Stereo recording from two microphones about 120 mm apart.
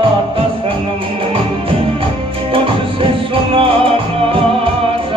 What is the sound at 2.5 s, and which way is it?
Music, 50° right (ahead or behind).